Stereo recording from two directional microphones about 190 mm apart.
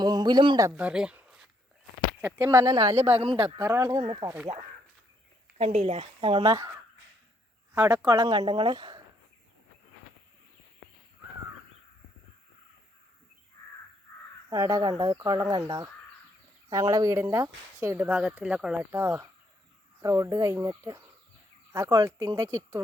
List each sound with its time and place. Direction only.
0.0 s a sound: 20° right (ahead or behind)
0.7 s speech: 5° right (ahead or behind); by 3.6 s 30° right (ahead or behind)
3.6 s speech: 15° right (ahead or behind)
5.5 s speech: 35° right (ahead or behind); by 6.7 s 15° right (ahead or behind)
7.8 s speech: 10° right (ahead or behind)
14.5 s speech: 15° right (ahead or behind)